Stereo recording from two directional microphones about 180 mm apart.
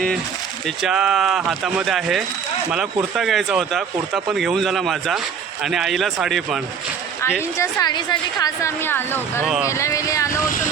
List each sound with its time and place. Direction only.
0.8 s speech: 5° right (ahead or behind)
7.6 s a woman's voice: 20° left (ahead or behind)
9.4 s speech: 5° right (ahead or behind)
9.6 s a woman's voice: 15° left (ahead or behind)